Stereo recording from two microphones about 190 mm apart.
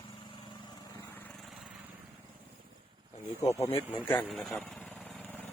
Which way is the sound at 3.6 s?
30° left (ahead or behind).